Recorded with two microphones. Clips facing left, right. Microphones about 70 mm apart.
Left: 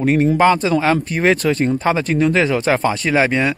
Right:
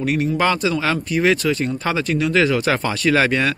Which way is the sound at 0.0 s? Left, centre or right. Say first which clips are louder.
Left 5 dB; left.